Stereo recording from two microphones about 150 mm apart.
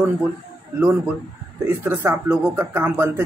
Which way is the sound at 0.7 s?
10° right (ahead or behind).